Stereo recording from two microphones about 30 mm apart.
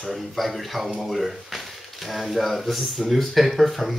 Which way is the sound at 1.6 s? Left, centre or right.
Centre.